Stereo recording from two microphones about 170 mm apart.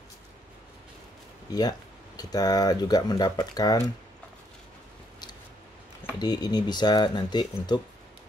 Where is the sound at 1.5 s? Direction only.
25° left (ahead or behind).